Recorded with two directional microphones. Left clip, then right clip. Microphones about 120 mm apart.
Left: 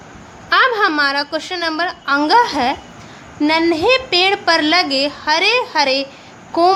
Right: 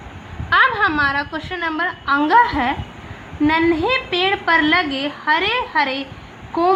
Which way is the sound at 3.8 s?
90° left.